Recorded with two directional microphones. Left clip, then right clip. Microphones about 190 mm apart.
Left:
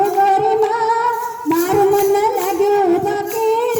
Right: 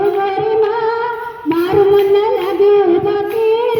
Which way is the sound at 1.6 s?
40° left (ahead or behind).